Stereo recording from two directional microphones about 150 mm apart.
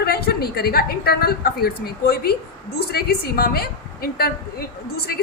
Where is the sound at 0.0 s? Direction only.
90° left.